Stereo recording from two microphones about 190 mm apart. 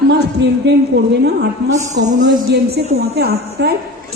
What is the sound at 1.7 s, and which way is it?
Speech, 40° right (ahead or behind).